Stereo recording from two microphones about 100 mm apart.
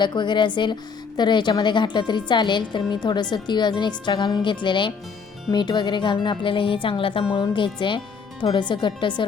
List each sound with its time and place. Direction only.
0.0 s speech: 50° left (ahead or behind)